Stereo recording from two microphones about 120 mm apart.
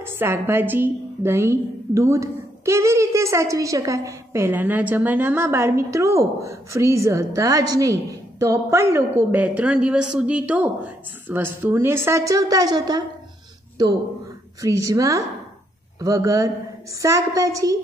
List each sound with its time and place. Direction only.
0.0 s a woman's voice: 20° right (ahead or behind)